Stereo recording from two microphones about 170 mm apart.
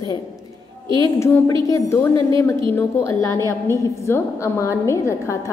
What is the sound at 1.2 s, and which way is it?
A woman's voice, 15° left (ahead or behind).